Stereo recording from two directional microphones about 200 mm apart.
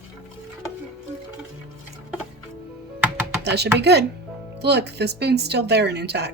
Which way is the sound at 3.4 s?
55° right (ahead or behind).